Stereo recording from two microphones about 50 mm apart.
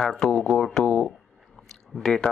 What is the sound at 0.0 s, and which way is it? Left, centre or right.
Speech, centre.